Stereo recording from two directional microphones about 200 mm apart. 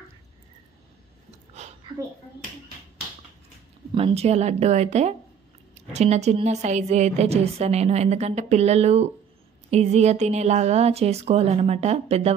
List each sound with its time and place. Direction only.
3.9 s a woman's voice: 30° right (ahead or behind)